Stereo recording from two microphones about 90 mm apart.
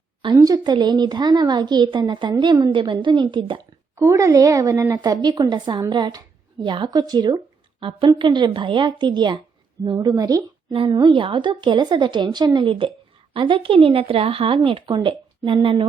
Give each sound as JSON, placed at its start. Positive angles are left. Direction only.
{"t": 0.3, "sound": "a woman's voice", "side_deg": -45}
{"t": 3.9, "sound": "a woman's voice", "side_deg": -35}
{"t": 7.8, "sound": "a woman's voice", "side_deg": -70}
{"t": 10.7, "sound": "a woman's voice", "side_deg": -70}
{"t": 12.5, "sound": "a woman's voice", "side_deg": -70}